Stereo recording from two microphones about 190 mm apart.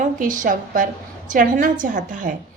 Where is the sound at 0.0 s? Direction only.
45° right (ahead or behind).